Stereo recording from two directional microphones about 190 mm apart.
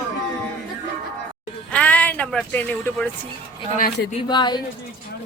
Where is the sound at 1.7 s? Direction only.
5° left (ahead or behind).